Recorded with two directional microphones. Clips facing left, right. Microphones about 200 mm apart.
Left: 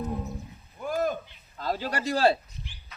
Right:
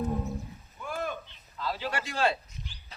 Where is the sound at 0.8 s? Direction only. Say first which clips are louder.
Left 7 dB; 40° left (ahead or behind).